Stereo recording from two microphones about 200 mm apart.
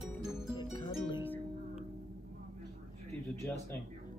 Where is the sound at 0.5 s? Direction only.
25° left (ahead or behind).